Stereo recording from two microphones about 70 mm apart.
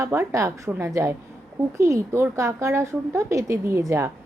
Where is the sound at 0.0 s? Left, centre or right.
Right.